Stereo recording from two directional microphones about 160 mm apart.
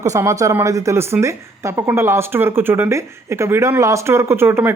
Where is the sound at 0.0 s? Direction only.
20° right (ahead or behind).